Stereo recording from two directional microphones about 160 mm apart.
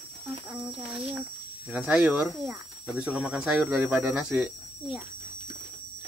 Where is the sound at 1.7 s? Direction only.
5° right (ahead or behind).